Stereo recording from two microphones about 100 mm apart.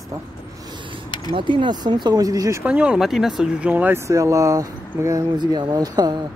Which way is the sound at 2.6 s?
10° right (ahead or behind).